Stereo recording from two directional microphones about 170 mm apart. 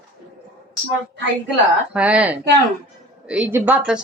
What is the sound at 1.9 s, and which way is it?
Speech, 5° right (ahead or behind).